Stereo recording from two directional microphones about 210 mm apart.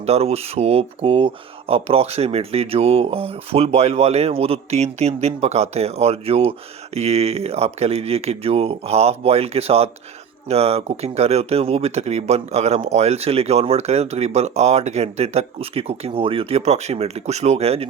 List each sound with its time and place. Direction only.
0.0 s speech: 30° right (ahead or behind)